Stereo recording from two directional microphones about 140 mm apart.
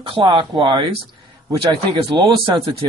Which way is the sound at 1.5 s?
35° right (ahead or behind).